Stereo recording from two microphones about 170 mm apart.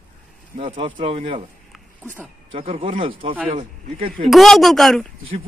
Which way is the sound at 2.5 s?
30° right (ahead or behind).